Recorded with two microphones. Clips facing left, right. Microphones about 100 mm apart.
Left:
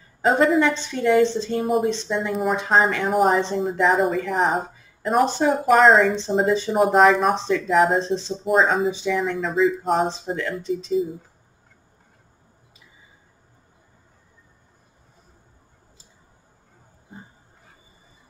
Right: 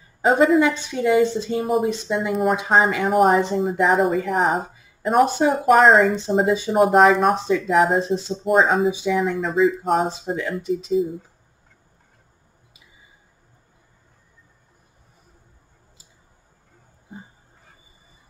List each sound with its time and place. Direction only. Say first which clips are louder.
0.2 s speech: right 2 dB; centre (ahead or behind)